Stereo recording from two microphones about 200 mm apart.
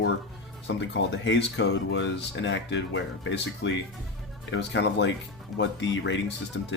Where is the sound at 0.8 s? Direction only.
65° left (ahead or behind).